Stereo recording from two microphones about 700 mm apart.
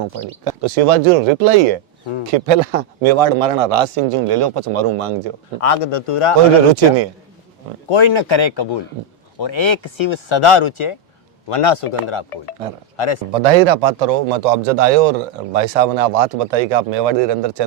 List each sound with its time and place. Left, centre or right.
0.4 s a man's voice: right
5.5 s speech: left
7.9 s speech: left
13.3 s a man's voice: right